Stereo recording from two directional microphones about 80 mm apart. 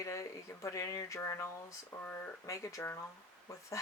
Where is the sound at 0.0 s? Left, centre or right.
Left.